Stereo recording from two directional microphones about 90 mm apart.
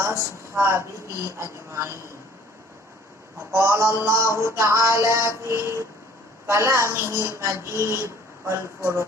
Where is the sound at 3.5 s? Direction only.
35° right (ahead or behind).